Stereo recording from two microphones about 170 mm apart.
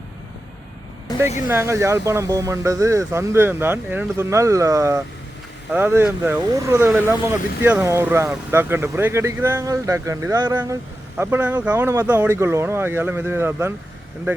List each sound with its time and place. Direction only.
1.1 s vehicle: 25° left (ahead or behind)
1.5 s speech: 15° right (ahead or behind)